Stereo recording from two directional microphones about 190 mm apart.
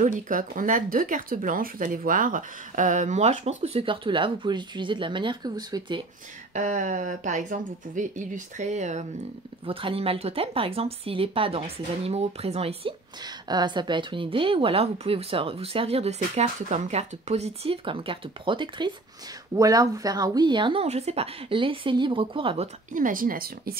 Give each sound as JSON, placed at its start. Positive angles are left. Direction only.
{"t": 0.0, "sound": "speech", "side_deg": -45}
{"t": 6.5, "sound": "speech", "side_deg": -40}
{"t": 22.9, "sound": "speech", "side_deg": -45}